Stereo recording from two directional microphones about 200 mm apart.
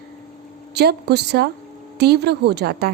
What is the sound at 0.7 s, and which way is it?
A woman's voice, 55° right (ahead or behind).